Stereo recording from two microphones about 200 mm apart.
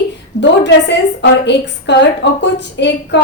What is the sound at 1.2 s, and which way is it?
A woman's voice, 60° left (ahead or behind).